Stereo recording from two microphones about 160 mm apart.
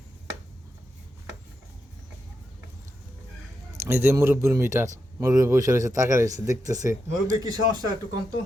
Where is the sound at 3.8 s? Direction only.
15° right (ahead or behind).